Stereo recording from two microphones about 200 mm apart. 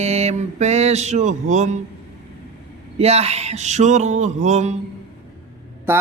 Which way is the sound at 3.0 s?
30° right (ahead or behind).